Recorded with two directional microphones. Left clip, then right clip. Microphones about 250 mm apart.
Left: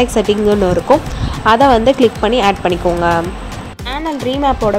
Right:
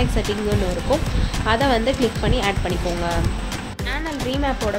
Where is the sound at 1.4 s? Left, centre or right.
Left.